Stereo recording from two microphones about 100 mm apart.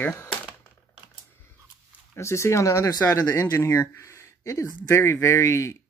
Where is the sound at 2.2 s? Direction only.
30° left (ahead or behind).